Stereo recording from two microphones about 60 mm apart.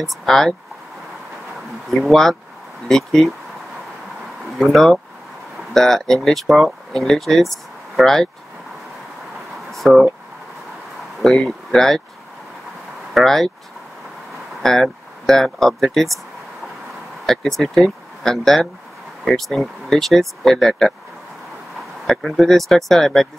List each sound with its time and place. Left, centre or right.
0.1 s speech: centre
1.9 s speech: centre
4.5 s speech: centre
9.7 s a sound: centre
11.1 s speech: centre
13.1 s speech: centre
14.6 s speech: centre
17.3 s speech: centre
22.0 s speech: centre